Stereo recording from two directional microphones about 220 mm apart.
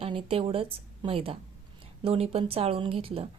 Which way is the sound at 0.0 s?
25° right (ahead or behind).